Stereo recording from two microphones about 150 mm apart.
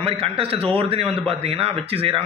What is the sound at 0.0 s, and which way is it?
A man's voice, 40° right (ahead or behind).